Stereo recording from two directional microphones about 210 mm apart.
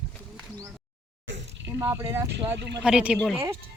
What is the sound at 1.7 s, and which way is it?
Speech, 10° right (ahead or behind).